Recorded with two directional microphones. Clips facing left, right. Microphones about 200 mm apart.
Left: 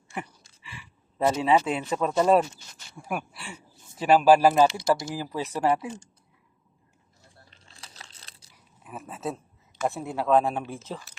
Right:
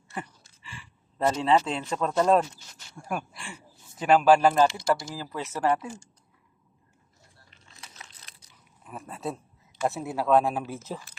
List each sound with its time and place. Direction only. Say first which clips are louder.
0.1 s speech: left 1 dB; 10° left (ahead or behind)
7.5 s crunch: right 2 dB; 30° left (ahead or behind)
8.8 s speech: left 1 dB; 5° left (ahead or behind)